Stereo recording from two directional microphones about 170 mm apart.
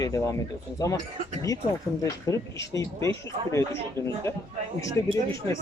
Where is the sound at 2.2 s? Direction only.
20° left (ahead or behind).